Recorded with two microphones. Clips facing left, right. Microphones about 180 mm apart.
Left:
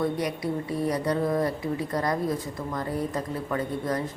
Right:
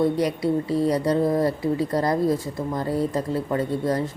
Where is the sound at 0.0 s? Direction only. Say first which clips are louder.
Right 6 dB; 25° right (ahead or behind).